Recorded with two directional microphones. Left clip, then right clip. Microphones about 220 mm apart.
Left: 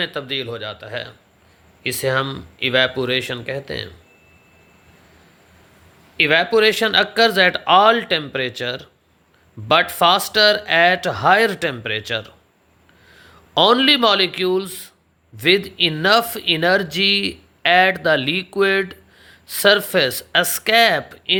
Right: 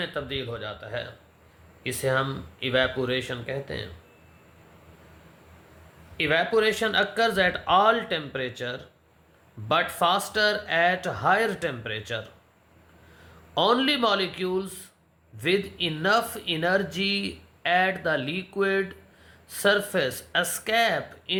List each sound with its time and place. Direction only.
0.0 s speech: 45° left (ahead or behind)
6.1 s speech: 45° left (ahead or behind)
13.5 s speech: 45° left (ahead or behind)